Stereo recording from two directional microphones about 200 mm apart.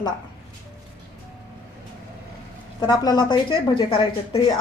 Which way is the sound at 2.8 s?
20° left (ahead or behind).